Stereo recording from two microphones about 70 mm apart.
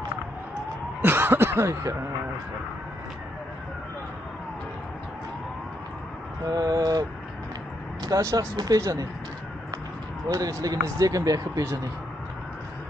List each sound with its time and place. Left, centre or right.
1.0 s snicker: right
6.5 s speech: right
8.2 s speech: right
8.5 s speech: right
10.2 s speech: right